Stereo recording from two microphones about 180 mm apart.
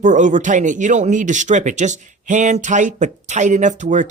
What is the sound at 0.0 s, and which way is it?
Speech, 45° right (ahead or behind).